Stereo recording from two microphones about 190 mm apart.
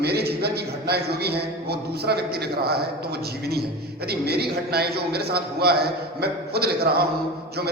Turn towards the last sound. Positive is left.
turn(degrees=-55)  # may be behind; listen again after turning